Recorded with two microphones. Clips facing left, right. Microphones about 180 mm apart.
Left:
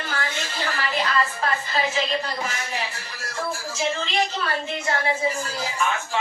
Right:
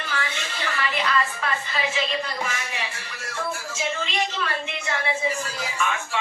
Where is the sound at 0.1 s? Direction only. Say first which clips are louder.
Even; 40° left (ahead or behind).